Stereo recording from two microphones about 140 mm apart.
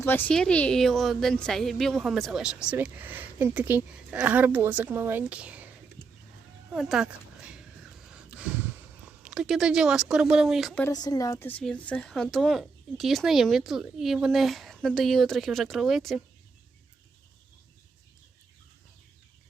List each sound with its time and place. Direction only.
0.0 s a woman's voice: 15° left (ahead or behind); by 5.6 s 10° right (ahead or behind)
6.7 s a sound: 5° right (ahead or behind)
9.0 s speech: 5° right (ahead or behind)
10.9 s a woman's voice: 30° left (ahead or behind)
11.4 s speech: 10° left (ahead or behind)